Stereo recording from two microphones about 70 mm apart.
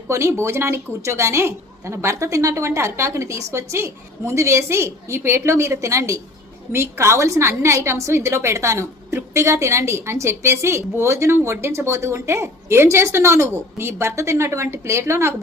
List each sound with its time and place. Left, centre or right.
0.1 s a woman's voice: right
6.7 s a woman's voice: right